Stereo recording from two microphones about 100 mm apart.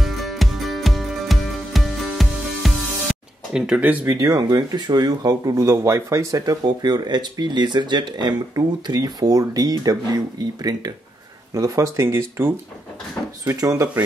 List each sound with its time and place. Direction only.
0.0 s music: centre (ahead or behind)
3.6 s speech: 15° right (ahead or behind)
4.2 s speech: 40° right (ahead or behind); by 12.5 s 25° right (ahead or behind)
13.5 s speech: 35° right (ahead or behind)